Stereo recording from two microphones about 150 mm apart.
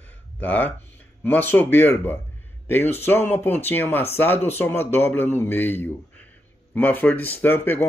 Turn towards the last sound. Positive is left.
turn(degrees=15)  # may be behind; listen again after turning